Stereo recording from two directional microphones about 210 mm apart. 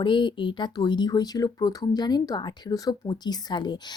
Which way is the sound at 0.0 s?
20° left (ahead or behind).